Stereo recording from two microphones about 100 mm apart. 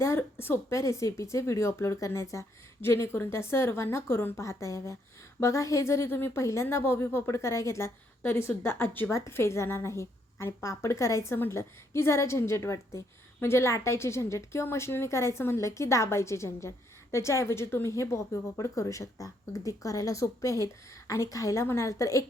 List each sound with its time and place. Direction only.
0.0 s a woman's voice: 25° left (ahead or behind)